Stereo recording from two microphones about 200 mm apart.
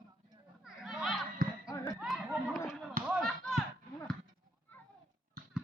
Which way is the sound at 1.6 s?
15° left (ahead or behind).